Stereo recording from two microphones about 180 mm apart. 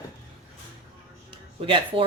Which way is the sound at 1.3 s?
30° right (ahead or behind).